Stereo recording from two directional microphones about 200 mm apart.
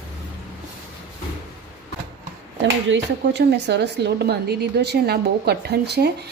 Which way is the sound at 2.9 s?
60° right (ahead or behind).